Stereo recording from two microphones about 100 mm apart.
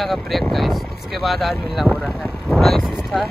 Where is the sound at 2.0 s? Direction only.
5° left (ahead or behind).